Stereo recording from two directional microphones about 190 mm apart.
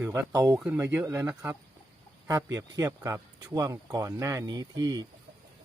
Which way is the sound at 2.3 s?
15° right (ahead or behind).